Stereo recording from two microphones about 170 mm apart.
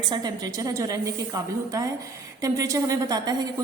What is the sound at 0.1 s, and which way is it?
A woman's voice, 25° right (ahead or behind).